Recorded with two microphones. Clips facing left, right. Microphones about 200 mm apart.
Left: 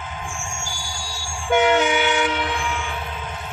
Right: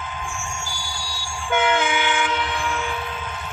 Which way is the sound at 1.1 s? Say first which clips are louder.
Left 4 dB; 45° left (ahead or behind).